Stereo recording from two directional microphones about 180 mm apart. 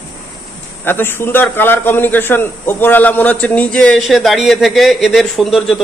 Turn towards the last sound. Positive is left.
turn(degrees=0)  # may be behind; listen again after turning